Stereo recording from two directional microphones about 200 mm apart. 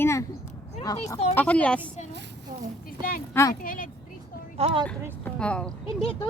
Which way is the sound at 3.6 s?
45° left (ahead or behind).